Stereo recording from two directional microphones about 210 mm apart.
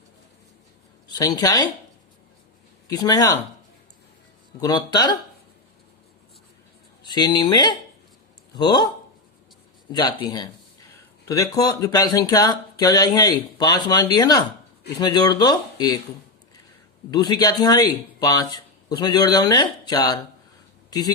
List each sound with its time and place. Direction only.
1.0 s speech: 20° left (ahead or behind)
2.8 s speech: 15° left (ahead or behind)
4.6 s speech: 20° left (ahead or behind)
7.0 s speech: 20° left (ahead or behind)
9.9 s speech: 20° left (ahead or behind)
17.1 s speech: 20° left (ahead or behind)